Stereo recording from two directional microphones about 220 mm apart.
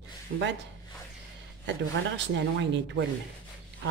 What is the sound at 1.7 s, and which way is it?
Speech, 55° right (ahead or behind).